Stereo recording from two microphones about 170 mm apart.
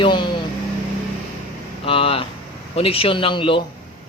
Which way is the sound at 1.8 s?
35° left (ahead or behind).